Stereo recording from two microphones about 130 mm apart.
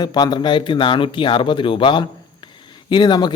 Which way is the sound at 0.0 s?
30° left (ahead or behind).